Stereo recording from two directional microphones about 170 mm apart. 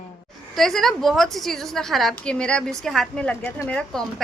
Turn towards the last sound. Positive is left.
turn(degrees=5)  # may be behind; listen again after turning